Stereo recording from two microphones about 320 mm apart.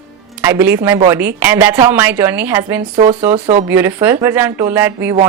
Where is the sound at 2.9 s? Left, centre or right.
Centre.